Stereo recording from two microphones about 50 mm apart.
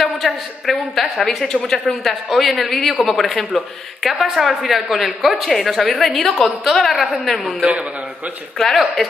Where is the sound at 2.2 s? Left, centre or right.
Centre.